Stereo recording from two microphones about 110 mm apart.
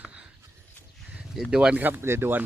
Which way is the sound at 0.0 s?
10° right (ahead or behind).